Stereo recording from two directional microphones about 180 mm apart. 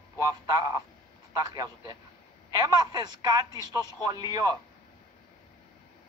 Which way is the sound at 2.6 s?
20° right (ahead or behind).